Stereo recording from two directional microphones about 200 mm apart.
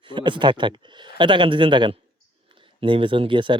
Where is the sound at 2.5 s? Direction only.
25° right (ahead or behind).